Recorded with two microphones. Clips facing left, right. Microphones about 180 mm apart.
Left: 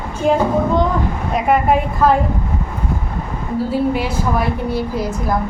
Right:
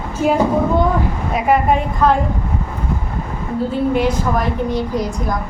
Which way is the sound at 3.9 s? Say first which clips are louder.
Right 2 dB; 5° left (ahead or behind).